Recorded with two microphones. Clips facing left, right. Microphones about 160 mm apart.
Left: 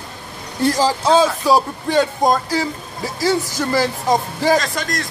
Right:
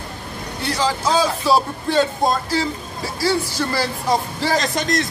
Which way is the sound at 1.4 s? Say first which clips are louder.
Left 2 dB; 15° left (ahead or behind).